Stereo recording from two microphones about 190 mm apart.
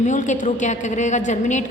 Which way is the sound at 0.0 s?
40° left (ahead or behind).